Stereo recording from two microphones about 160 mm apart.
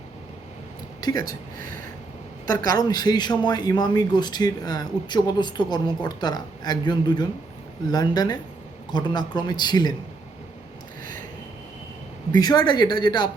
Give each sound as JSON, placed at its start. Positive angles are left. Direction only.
{"t": 1.0, "sound": "speech", "side_deg": 25}
{"t": 2.7, "sound": "speech", "side_deg": 25}
{"t": 12.4, "sound": "speech", "side_deg": 25}